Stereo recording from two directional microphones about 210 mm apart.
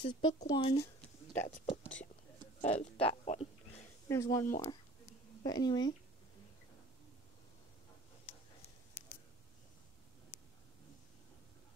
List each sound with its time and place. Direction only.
0.0 s speech: 20° left (ahead or behind)
2.6 s a sound: 30° left (ahead or behind)
4.1 s speech: 15° left (ahead or behind)